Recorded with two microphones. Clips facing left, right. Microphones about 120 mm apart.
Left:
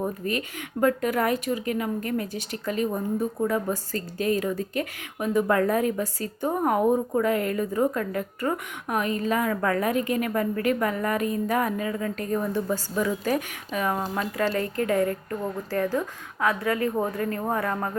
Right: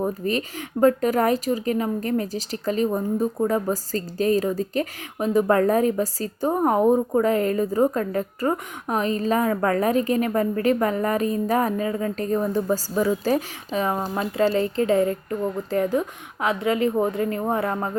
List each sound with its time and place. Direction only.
0.3 s a woman's voice: 30° right (ahead or behind)